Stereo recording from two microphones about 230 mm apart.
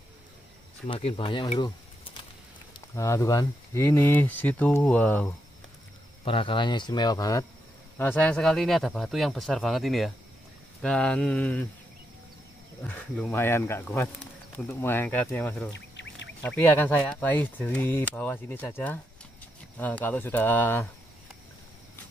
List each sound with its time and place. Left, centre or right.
0.8 s speech: left
3.0 s speech: centre
6.2 s speech: left; by 11.6 s centre
12.8 s speech: centre
15.7 s duck: left
16.4 s speech: centre